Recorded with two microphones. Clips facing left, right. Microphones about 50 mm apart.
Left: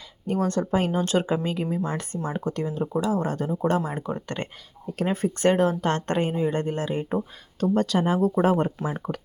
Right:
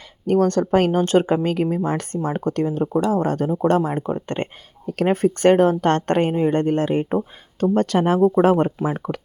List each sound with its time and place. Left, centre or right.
0.3 s speech: right
4.0 s speech: right
5.0 s speech: right